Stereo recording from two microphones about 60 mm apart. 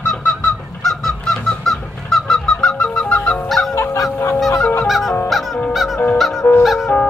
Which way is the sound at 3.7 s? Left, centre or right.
Left.